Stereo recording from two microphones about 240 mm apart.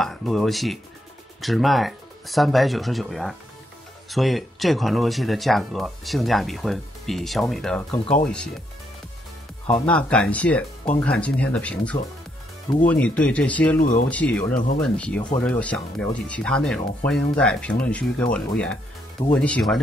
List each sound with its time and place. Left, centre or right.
0.0 s speech: centre
9.8 s speech: centre
13.7 s speech: left
14.1 s speech: centre